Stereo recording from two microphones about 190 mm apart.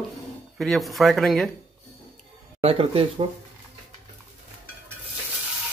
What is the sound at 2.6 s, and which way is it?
Speech, 30° right (ahead or behind).